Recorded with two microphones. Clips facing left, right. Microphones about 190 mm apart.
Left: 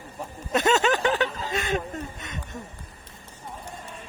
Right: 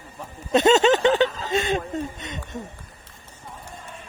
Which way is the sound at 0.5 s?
20° right (ahead or behind).